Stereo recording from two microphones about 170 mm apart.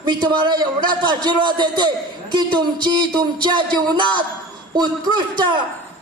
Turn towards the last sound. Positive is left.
turn(degrees=-25)  # may be behind; listen again after turning